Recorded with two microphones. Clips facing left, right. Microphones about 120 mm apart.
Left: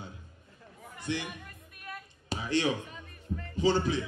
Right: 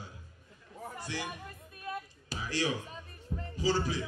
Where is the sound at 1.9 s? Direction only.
25° right (ahead or behind).